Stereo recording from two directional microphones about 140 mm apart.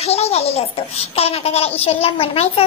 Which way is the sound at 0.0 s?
50° left (ahead or behind).